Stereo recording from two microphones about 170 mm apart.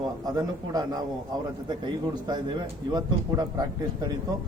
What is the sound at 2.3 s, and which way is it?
A man's voice, 25° right (ahead or behind).